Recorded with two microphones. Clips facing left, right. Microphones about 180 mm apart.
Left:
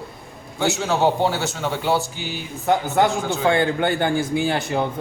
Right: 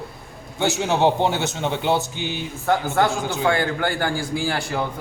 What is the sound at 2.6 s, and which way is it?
A man's voice, 20° left (ahead or behind).